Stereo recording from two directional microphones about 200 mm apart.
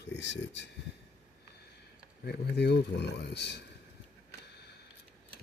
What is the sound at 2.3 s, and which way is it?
Speech, 55° left (ahead or behind).